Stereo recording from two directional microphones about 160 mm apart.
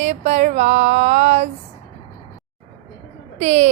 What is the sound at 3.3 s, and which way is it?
Speech, 45° right (ahead or behind).